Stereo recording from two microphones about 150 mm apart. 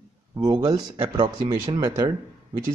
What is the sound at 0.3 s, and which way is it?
A man's voice, 25° right (ahead or behind).